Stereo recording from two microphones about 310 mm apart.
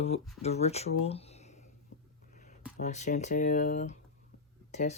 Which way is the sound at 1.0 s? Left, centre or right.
Centre.